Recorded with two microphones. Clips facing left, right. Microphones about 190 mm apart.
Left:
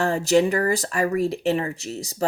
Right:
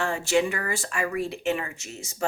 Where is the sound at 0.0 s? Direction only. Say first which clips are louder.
Left 5 dB; 40° left (ahead or behind).